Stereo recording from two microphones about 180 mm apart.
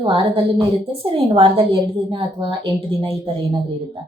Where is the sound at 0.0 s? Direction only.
30° right (ahead or behind).